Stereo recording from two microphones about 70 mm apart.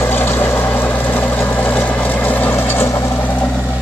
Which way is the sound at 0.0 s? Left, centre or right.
Left.